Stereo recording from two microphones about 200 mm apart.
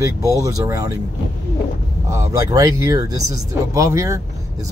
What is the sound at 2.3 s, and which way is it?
Speech, 15° right (ahead or behind).